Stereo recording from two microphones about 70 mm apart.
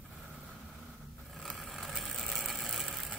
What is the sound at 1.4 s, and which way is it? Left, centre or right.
Vehicle, centre.